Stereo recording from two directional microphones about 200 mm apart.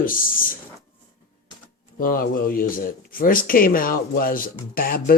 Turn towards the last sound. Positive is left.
turn(degrees=45)  # may be behind; listen again after turning